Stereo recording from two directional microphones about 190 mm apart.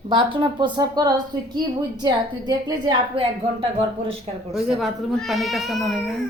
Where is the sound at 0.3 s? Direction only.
25° right (ahead or behind).